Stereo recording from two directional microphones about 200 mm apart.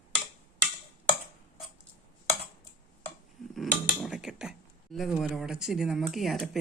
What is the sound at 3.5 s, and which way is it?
Speech, centre (ahead or behind).